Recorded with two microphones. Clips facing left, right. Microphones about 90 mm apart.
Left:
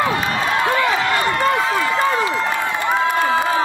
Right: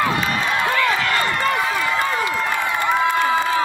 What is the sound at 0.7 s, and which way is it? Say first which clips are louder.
Run: left 1 dB; 20° left (ahead or behind).